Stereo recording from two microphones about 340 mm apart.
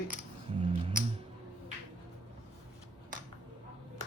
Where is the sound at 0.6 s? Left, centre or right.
Centre.